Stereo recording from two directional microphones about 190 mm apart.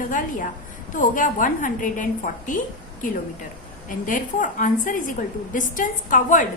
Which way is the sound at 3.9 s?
45° left (ahead or behind).